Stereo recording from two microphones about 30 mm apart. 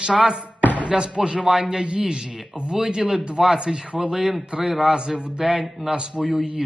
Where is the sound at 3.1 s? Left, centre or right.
Right.